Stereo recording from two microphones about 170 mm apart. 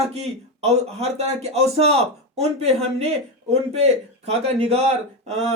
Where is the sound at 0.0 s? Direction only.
40° right (ahead or behind).